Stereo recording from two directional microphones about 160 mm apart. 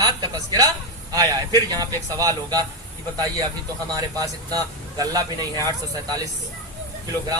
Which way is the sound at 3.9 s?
20° right (ahead or behind).